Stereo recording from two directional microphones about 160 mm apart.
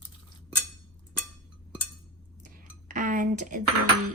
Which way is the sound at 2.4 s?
55° right (ahead or behind).